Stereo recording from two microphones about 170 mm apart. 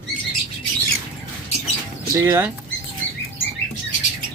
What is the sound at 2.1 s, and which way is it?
Speech, 15° right (ahead or behind).